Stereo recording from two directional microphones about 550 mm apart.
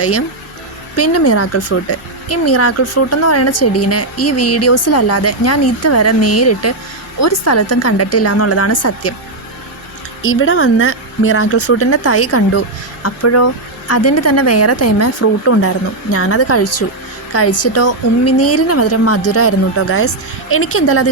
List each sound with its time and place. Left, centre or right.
0.9 s speech: left
10.2 s speech: left